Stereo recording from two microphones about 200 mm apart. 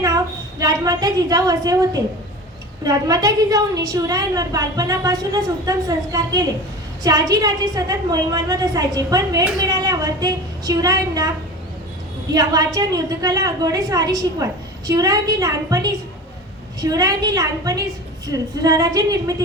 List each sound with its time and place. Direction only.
0.6 s a woman's voice: 20° right (ahead or behind)
12.3 s a woman's voice: 15° right (ahead or behind)